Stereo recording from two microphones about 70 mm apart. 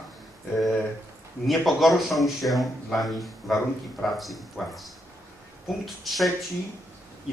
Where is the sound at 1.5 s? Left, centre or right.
Centre.